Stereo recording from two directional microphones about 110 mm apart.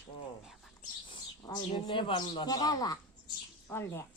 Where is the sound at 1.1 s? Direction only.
40° left (ahead or behind).